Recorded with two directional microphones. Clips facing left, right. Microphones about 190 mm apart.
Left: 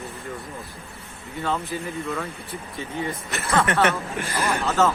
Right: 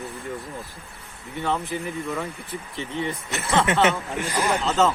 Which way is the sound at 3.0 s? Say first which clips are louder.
Even; 15° right (ahead or behind).